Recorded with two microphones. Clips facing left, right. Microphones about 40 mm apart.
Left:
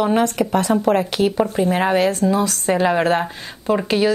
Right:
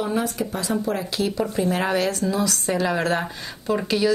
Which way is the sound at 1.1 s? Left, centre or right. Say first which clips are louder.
Left 6 dB; left.